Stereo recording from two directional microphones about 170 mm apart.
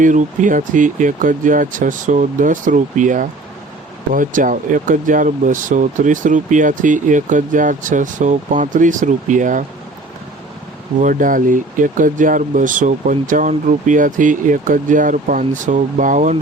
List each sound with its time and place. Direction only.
0.0 s speech: 50° right (ahead or behind)
11.0 s speech: 50° right (ahead or behind)